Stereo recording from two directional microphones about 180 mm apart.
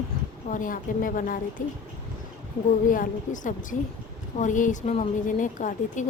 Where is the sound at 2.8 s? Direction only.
45° left (ahead or behind).